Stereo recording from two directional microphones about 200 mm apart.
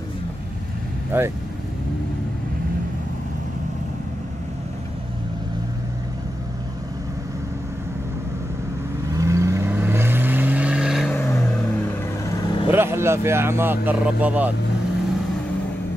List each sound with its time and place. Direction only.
1.1 s speech: 10° right (ahead or behind)
9.1 s vehicle: 15° right (ahead or behind)
11.1 s vehicle: 15° left (ahead or behind)
12.7 s speech: 10° right (ahead or behind)